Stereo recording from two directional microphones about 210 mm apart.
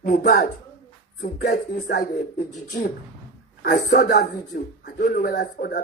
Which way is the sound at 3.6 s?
45° left (ahead or behind).